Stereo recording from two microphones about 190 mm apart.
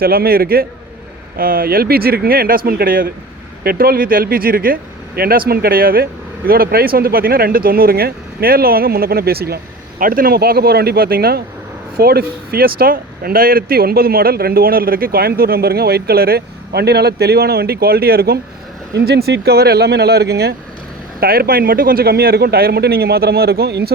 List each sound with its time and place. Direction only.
0.0 s speech: 50° right (ahead or behind)